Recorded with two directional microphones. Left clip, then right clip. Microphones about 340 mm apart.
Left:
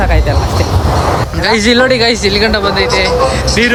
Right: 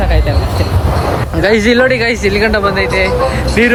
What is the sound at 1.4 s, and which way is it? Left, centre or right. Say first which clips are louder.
A man's voice: right 1 dB; centre.